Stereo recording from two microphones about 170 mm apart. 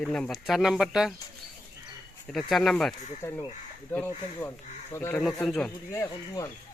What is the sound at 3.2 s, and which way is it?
Speech, 15° left (ahead or behind).